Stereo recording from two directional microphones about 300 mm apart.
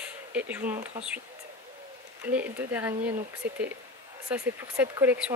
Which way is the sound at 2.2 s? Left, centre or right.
Centre.